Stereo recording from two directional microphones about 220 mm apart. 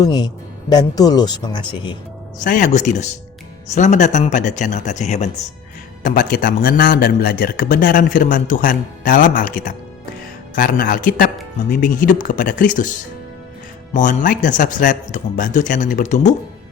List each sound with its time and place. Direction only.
0.0 s speech: 20° left (ahead or behind)
2.4 s a man's voice: 35° left (ahead or behind)
13.9 s a man's voice: 35° left (ahead or behind)